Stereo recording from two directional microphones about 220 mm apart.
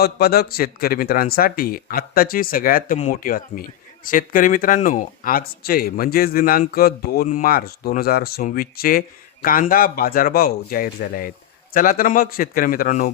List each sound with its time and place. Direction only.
0.0 s speech: 45° left (ahead or behind)